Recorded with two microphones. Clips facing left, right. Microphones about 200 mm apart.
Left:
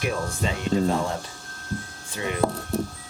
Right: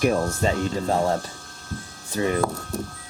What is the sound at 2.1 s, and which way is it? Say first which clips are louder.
Speech: right 6 dB; 40° right (ahead or behind).